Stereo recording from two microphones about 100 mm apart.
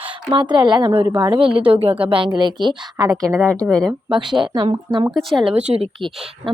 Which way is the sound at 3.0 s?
35° right (ahead or behind).